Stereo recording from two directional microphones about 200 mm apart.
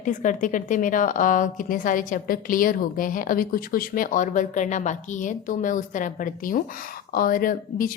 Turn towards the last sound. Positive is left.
turn(degrees=45)  # may be behind; listen again after turning